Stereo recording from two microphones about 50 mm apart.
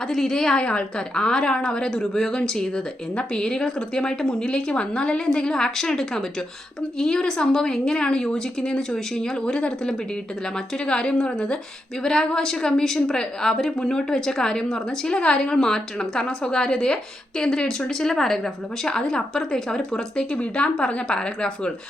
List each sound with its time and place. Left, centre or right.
0.1 s a woman's voice: centre